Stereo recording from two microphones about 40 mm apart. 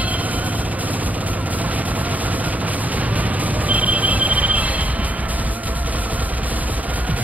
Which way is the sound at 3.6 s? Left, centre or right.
Right.